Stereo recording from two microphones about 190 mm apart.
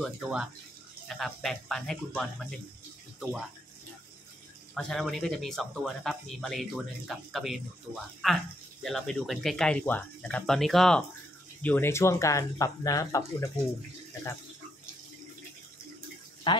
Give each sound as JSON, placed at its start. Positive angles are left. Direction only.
{"t": 0.0, "sound": "speech", "side_deg": -5}
{"t": 4.7, "sound": "speech", "side_deg": 0}
{"t": 16.5, "sound": "speech", "side_deg": 25}